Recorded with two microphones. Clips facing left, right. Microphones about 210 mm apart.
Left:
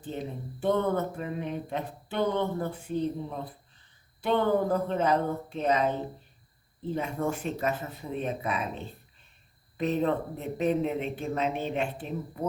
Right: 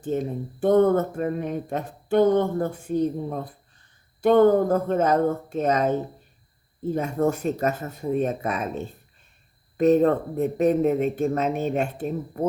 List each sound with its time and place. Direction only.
0.0 s speech: 45° right (ahead or behind)